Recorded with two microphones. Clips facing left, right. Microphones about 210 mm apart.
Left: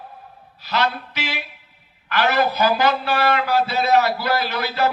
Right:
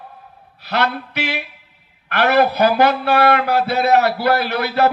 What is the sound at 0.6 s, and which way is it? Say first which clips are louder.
A man's voice: right 2 dB; 60° right (ahead or behind).